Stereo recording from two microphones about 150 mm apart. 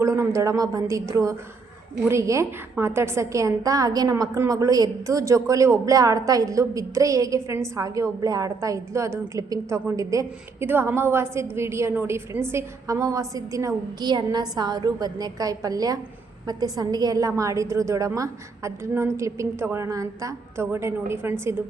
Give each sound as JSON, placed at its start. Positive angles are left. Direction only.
{"t": 0.0, "sound": "a woman's voice", "side_deg": -20}